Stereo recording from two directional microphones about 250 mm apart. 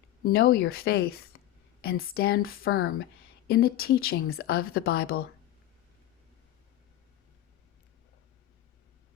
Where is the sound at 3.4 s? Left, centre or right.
Left.